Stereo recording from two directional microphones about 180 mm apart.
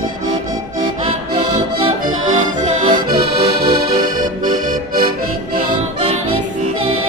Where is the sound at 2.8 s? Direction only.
25° right (ahead or behind).